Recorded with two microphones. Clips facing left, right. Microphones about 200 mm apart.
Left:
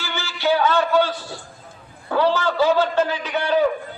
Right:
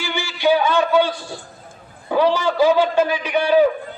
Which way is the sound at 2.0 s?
15° right (ahead or behind).